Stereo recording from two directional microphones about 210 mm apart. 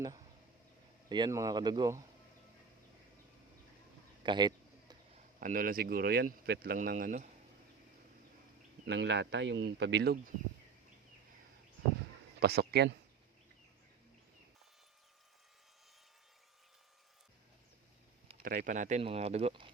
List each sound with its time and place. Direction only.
1.1 s speech: 20° right (ahead or behind)
4.2 s a sound: 20° right (ahead or behind)
5.4 s speech: 40° right (ahead or behind)
8.9 s speech: 55° right (ahead or behind)
12.4 s speech: 50° right (ahead or behind)
18.4 s speech: 40° right (ahead or behind)